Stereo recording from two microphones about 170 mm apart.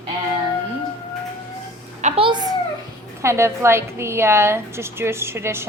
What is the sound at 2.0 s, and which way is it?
Speech, 30° right (ahead or behind).